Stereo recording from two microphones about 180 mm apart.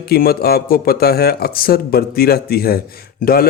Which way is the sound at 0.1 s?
60° left (ahead or behind).